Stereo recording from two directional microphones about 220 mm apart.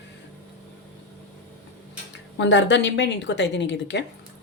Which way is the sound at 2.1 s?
55° left (ahead or behind).